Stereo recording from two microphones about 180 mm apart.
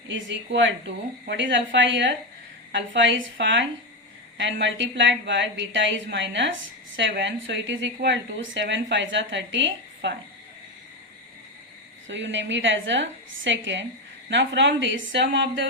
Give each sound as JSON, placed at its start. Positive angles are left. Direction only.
{"t": 0.1, "sound": "a woman's voice", "side_deg": -90}
{"t": 12.0, "sound": "a woman's voice", "side_deg": -90}